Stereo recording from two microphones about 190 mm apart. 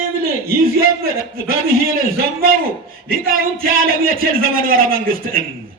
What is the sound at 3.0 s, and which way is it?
A man's voice, 50° right (ahead or behind).